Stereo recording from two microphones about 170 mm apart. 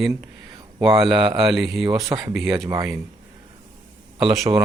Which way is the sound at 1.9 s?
25° right (ahead or behind).